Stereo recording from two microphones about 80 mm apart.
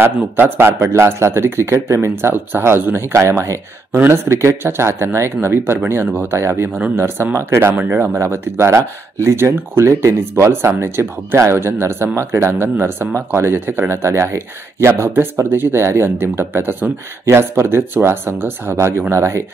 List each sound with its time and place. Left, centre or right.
0.0 s speech: right